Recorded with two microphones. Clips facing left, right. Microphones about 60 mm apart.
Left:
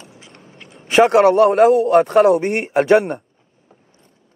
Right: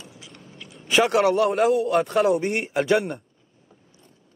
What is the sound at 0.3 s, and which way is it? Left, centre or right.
A man's voice, left.